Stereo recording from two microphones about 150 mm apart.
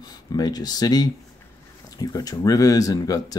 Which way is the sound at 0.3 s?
25° left (ahead or behind).